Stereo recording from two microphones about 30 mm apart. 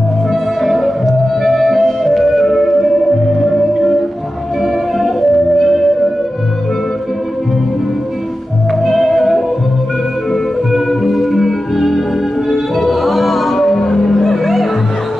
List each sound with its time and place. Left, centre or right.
0.3 s music: centre
8.8 s music: centre
10.9 s music: centre
13.7 s a sound: left
14.0 s music: centre